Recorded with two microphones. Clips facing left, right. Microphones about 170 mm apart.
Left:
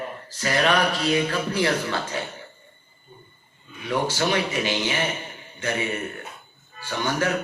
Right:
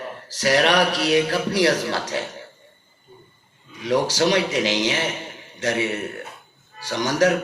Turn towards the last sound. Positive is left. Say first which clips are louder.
# right 5 dB
turn(degrees=-90)